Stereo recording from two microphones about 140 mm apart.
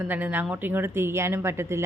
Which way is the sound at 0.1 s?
10° right (ahead or behind).